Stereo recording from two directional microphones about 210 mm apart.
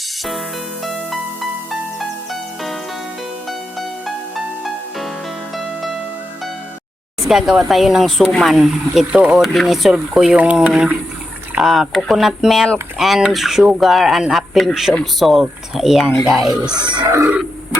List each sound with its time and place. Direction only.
0.9 s music: centre (ahead or behind)
4.6 s music: centre (ahead or behind)
7.3 s speech: centre (ahead or behind)
16.7 s speech: 20° right (ahead or behind)